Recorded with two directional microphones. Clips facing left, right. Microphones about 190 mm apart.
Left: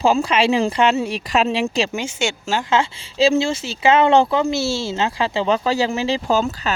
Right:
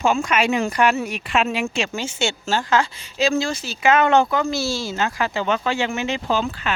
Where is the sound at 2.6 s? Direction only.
25° left (ahead or behind).